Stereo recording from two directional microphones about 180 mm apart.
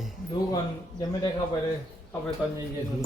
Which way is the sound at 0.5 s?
20° left (ahead or behind).